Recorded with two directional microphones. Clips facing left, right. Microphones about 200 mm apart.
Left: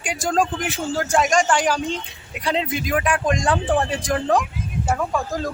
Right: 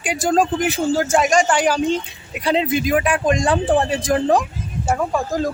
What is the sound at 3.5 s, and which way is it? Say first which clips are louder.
Speech: right 3 dB; 15° right (ahead or behind).